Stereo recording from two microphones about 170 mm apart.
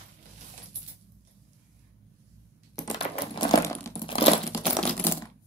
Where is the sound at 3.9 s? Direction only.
30° left (ahead or behind).